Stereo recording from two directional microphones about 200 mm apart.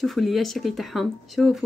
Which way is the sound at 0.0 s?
Centre (ahead or behind).